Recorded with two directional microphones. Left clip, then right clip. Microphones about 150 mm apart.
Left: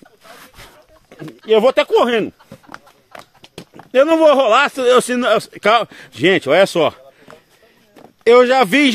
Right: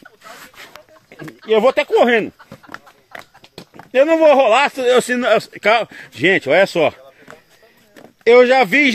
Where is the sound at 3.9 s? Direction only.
30° left (ahead or behind).